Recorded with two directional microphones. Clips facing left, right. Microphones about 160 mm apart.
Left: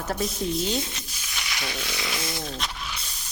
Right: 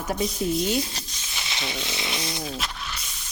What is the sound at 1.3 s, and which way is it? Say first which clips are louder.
Speech: right 1 dB; 25° right (ahead or behind).